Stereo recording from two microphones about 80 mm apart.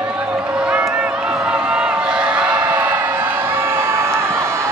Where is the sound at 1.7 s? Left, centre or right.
Centre.